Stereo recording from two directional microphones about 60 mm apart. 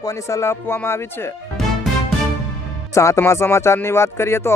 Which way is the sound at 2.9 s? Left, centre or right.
Left.